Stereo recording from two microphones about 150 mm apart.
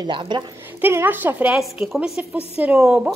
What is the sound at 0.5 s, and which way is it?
A woman's voice, 15° right (ahead or behind).